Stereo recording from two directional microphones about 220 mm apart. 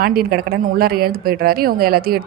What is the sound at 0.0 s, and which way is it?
A woman's voice, 45° right (ahead or behind).